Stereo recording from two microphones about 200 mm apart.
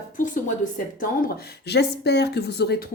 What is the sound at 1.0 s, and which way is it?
Speech, 50° left (ahead or behind).